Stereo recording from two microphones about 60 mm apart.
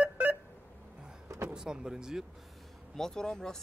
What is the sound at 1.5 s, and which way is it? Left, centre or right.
Speech, centre.